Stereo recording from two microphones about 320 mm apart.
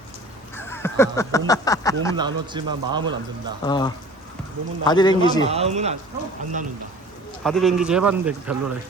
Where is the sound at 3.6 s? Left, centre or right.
Centre.